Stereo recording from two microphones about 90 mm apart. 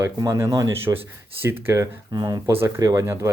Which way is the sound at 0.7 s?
25° right (ahead or behind).